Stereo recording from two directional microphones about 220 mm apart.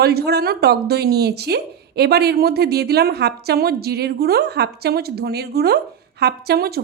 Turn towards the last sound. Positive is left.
turn(degrees=-45)  # may be behind; listen again after turning